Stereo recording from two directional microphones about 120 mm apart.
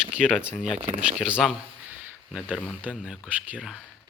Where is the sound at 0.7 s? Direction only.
55° right (ahead or behind).